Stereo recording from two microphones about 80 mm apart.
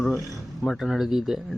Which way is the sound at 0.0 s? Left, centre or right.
Centre.